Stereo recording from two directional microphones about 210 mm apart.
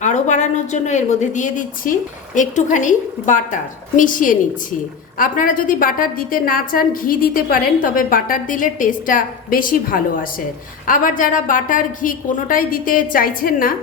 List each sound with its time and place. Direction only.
0.0 s a woman's voice: 35° left (ahead or behind)